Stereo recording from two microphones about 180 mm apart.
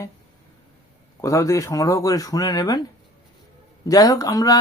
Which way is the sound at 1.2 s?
15° left (ahead or behind).